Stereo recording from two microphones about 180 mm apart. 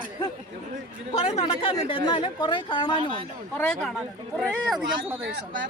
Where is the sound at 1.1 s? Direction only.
35° left (ahead or behind).